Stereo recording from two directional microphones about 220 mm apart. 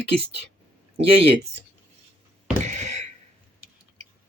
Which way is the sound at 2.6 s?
30° right (ahead or behind).